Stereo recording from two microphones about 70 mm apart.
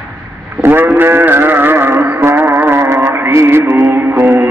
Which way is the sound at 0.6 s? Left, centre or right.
Right.